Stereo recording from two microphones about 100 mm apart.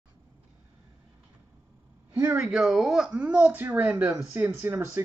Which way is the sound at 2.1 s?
20° right (ahead or behind).